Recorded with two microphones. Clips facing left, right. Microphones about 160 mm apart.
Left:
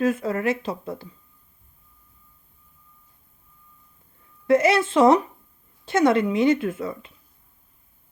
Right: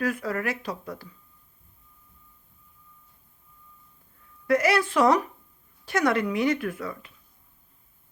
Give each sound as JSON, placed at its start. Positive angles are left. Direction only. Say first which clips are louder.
{"t": 0.0, "sound": "a woman's voice", "louder": "left 5 dB", "side_deg": 25}
{"t": 4.4, "sound": "a woman's voice", "louder": "left 4 dB", "side_deg": 25}